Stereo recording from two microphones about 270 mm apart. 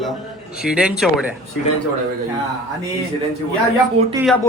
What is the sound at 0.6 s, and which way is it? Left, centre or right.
Speech, centre.